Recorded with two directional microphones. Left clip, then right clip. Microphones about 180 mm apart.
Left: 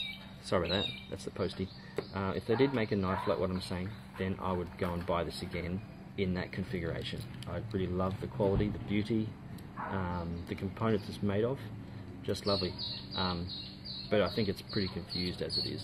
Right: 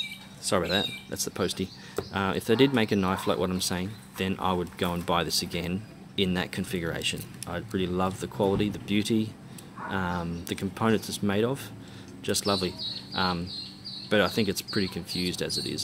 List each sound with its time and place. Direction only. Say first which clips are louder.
0.5 s speech: right 6 dB; 25° right (ahead or behind)